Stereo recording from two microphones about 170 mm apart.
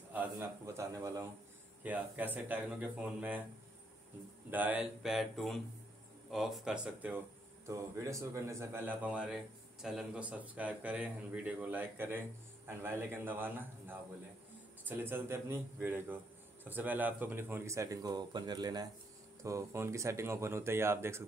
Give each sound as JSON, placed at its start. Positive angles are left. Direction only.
{"t": 0.1, "sound": "speech", "side_deg": -10}
{"t": 4.5, "sound": "speech", "side_deg": -10}